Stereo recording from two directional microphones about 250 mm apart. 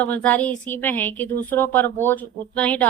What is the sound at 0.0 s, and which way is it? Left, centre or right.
A woman's voice, centre.